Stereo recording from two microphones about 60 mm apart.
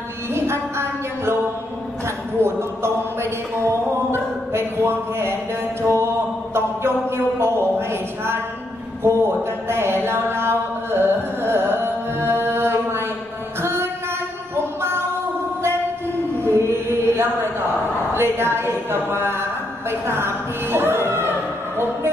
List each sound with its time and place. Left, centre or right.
0.3 s a sound: right
2.4 s mantra: right
6.5 s a sound: right
10.9 s carnatic music: right
13.6 s music: right
14.5 s a sound: right
16.4 s mantra: right
18.1 s a woman's voice: right
19.9 s music: right